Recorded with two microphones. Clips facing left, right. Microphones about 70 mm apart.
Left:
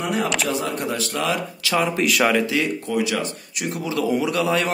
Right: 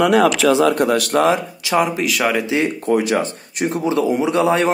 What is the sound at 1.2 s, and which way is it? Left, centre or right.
Speech, right.